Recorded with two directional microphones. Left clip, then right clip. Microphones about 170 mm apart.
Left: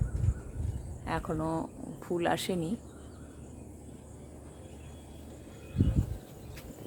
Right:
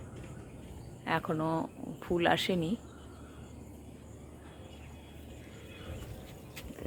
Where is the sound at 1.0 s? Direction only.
10° right (ahead or behind).